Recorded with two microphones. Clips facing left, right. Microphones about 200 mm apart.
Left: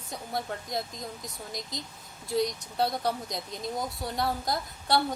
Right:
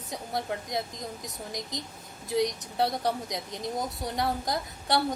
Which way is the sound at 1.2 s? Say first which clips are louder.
Right 2 dB; 20° right (ahead or behind).